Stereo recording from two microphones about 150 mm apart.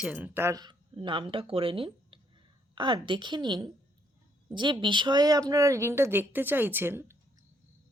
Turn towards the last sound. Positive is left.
turn(degrees=-15)  # may be behind; listen again after turning